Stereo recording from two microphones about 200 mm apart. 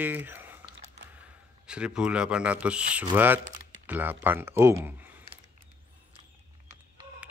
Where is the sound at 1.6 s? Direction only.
5° right (ahead or behind).